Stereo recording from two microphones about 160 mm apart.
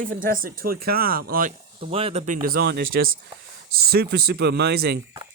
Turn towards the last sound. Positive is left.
turn(degrees=-85)